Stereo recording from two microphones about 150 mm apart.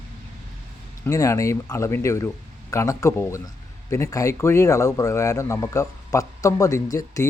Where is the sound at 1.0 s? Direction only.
20° left (ahead or behind).